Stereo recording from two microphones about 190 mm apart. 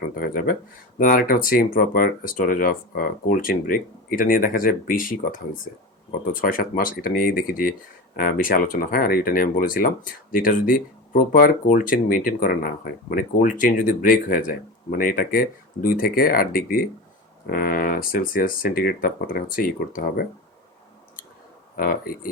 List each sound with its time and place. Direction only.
0.2 s speech: 50° left (ahead or behind)
21.8 s speech: 50° left (ahead or behind)